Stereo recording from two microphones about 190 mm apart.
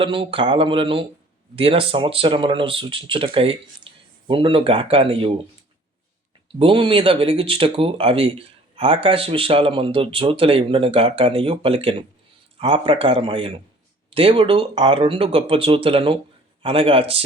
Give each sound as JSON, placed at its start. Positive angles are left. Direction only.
{"t": 0.0, "sound": "speech", "side_deg": -30}
{"t": 6.6, "sound": "speech", "side_deg": -25}